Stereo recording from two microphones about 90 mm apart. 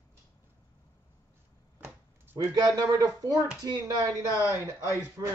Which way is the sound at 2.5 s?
45° right (ahead or behind).